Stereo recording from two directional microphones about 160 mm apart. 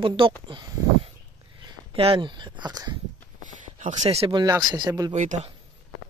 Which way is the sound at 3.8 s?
50° right (ahead or behind).